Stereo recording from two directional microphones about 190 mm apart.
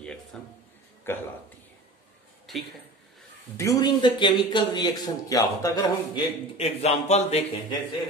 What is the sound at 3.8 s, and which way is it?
Speech, 20° left (ahead or behind).